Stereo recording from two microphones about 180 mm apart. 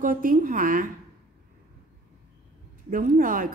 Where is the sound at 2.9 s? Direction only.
50° right (ahead or behind).